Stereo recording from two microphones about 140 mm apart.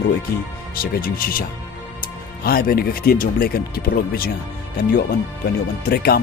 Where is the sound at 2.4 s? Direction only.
90° left.